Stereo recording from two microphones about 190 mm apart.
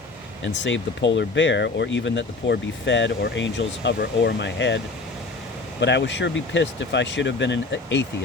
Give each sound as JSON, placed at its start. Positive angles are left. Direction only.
{"t": 0.4, "sound": "speech", "side_deg": 75}
{"t": 5.8, "sound": "speech", "side_deg": 65}